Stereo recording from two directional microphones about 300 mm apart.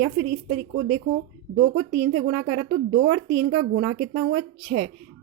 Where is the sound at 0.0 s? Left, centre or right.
Right.